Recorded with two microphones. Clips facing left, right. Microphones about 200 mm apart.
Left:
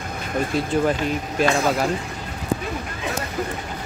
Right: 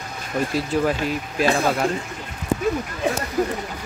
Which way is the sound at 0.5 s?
Centre (ahead or behind).